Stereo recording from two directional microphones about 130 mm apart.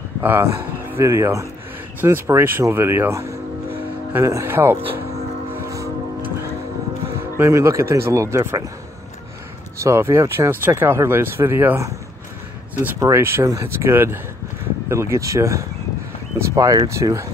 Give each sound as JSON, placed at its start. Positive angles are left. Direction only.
{"t": 0.2, "sound": "speech", "side_deg": -15}
{"t": 5.5, "sound": "vehicle", "side_deg": -25}
{"t": 7.2, "sound": "speech", "side_deg": -20}
{"t": 9.8, "sound": "speech", "side_deg": -20}
{"t": 13.0, "sound": "speech", "side_deg": -20}